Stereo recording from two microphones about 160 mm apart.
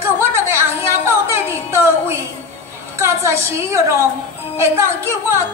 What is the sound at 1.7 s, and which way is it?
A woman's voice, 15° right (ahead or behind).